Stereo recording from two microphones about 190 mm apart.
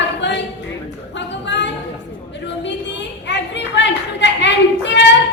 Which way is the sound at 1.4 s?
65° left (ahead or behind).